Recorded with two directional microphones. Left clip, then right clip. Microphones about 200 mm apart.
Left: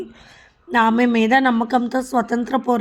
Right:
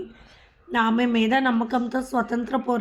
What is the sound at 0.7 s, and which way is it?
A woman's voice, 40° left (ahead or behind).